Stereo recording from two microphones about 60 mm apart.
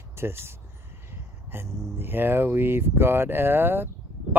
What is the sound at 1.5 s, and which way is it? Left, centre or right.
Speech, right.